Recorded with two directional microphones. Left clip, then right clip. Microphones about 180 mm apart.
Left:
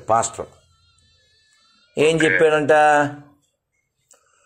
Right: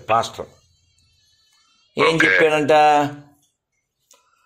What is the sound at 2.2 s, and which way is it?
Speech, 55° right (ahead or behind).